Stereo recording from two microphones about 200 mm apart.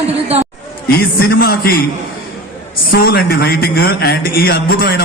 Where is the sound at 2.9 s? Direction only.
50° left (ahead or behind).